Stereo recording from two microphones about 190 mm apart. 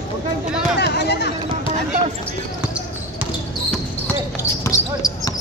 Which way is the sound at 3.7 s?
10° left (ahead or behind).